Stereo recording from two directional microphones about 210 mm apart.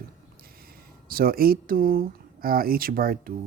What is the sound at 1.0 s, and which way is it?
Speech, 45° right (ahead or behind).